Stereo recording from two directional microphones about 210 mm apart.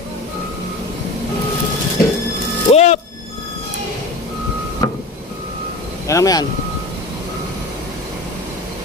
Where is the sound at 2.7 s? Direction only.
30° left (ahead or behind).